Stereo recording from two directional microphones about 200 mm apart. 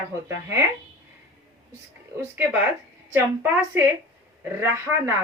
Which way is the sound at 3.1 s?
10° right (ahead or behind).